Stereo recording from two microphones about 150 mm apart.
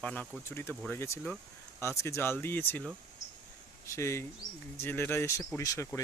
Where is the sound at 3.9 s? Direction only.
20° left (ahead or behind).